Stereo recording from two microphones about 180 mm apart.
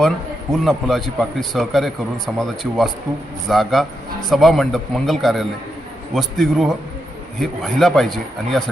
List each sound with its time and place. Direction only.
0.5 s speech: centre (ahead or behind)